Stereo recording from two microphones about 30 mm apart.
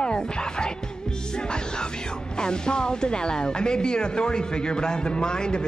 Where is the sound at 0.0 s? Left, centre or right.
Left.